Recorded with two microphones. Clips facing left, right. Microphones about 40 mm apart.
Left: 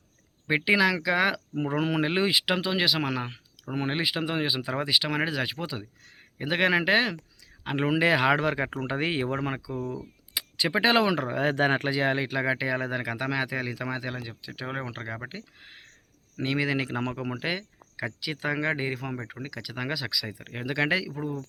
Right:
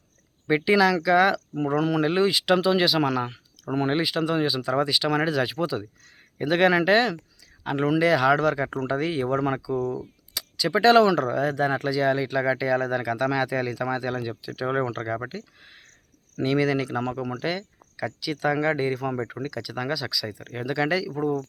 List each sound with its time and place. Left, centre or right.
0.4 s speech: centre
7.8 s speech: left
9.3 s speech: centre
10.3 s speech: left
11.3 s speech: left
11.8 s speech: left
12.3 s speech: centre
14.2 s speech: centre
14.5 s speech: centre
15.3 s a sound: centre
16.4 s speech: centre
16.7 s speech: left
21.1 s speech: centre